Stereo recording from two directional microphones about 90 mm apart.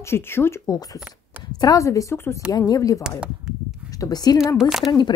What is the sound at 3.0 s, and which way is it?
Speech, 10° right (ahead or behind).